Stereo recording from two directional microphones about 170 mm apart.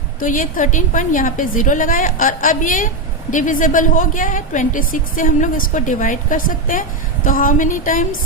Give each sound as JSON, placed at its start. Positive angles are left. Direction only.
{"t": 0.2, "sound": "a woman's voice", "side_deg": 50}